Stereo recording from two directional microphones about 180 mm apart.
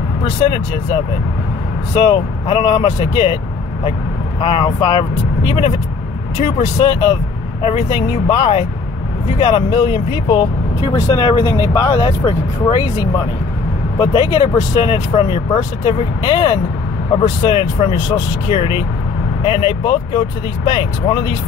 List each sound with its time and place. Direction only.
2.0 s speech: 30° left (ahead or behind)
4.4 s speech: 30° left (ahead or behind)
6.8 s speech: 25° left (ahead or behind)